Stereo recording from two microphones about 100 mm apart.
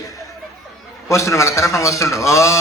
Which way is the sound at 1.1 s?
30° left (ahead or behind).